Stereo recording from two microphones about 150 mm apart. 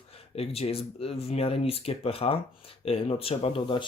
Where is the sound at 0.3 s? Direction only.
40° left (ahead or behind).